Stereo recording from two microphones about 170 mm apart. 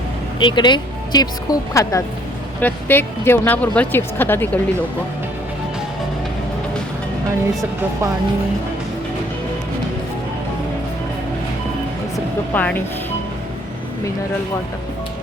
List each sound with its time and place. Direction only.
0.3 s speech: 25° left (ahead or behind); by 4.6 s 10° left (ahead or behind)
12.1 s speech: 10° left (ahead or behind)